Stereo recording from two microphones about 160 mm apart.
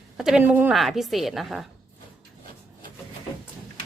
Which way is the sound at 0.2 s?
5° right (ahead or behind).